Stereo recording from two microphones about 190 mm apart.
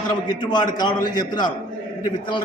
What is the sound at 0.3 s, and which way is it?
A man's voice, 25° left (ahead or behind).